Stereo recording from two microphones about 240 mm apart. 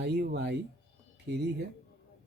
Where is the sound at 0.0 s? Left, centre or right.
Right.